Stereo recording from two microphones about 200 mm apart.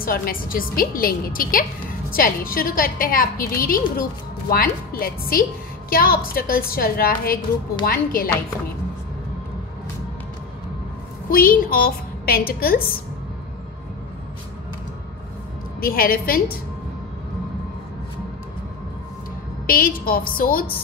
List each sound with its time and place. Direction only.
0.0 s a woman's voice: 45° left (ahead or behind)
11.2 s a woman's voice: 45° left (ahead or behind)
15.8 s a woman's voice: 45° left (ahead or behind)
19.6 s a woman's voice: 45° left (ahead or behind)